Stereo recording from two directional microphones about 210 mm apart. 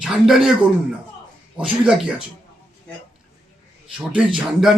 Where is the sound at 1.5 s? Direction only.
5° right (ahead or behind).